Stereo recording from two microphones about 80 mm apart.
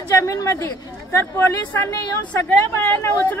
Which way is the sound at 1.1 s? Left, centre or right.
Left.